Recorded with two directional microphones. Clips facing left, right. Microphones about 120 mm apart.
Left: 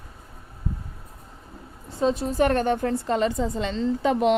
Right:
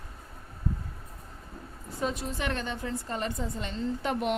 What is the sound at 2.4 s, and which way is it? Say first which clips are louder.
A woman's voice: left 12 dB; 50° left (ahead or behind).